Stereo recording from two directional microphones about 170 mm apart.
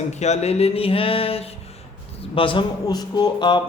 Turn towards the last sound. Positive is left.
turn(degrees=25)  # may be behind; listen again after turning